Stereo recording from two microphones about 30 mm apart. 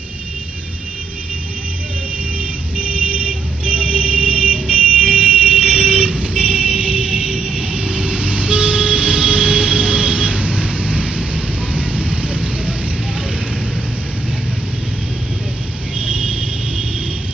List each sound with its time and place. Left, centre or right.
2.8 s vehicle: right
16.0 s vehicle: right